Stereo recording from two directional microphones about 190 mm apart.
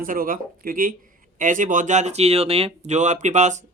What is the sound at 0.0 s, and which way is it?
Speech, 45° right (ahead or behind).